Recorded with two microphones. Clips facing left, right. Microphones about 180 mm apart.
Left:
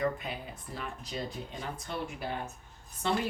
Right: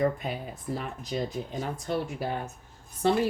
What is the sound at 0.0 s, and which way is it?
A woman's voice, 40° right (ahead or behind).